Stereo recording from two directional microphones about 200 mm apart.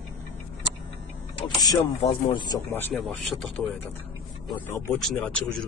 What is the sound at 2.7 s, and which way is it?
Speech, 5° left (ahead or behind).